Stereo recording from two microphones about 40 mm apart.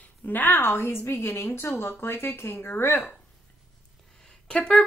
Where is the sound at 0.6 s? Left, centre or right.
Left.